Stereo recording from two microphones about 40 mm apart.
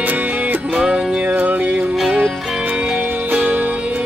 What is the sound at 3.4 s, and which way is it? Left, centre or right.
Music, right.